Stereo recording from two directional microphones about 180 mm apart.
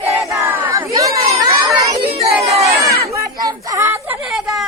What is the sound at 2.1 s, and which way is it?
Chatter, 35° right (ahead or behind).